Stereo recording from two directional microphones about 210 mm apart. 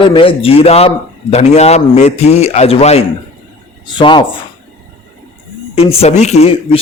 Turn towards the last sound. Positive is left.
turn(degrees=25)  # may be behind; listen again after turning